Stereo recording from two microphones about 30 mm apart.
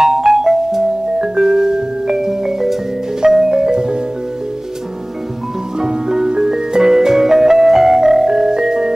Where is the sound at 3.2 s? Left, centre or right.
Right.